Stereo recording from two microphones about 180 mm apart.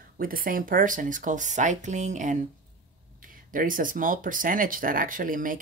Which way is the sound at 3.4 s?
50° right (ahead or behind).